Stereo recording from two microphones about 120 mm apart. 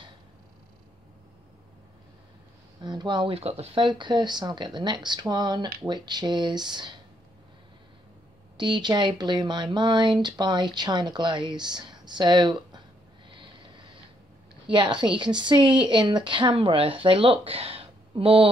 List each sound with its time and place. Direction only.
2.8 s speech: 35° right (ahead or behind)
3.3 s speech: 55° right (ahead or behind); by 6.9 s 35° right (ahead or behind)
8.5 s speech: 40° right (ahead or behind)
14.7 s speech: 40° right (ahead or behind)